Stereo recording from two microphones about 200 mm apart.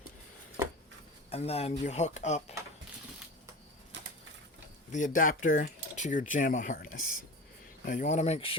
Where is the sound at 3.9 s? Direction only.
65° right (ahead or behind).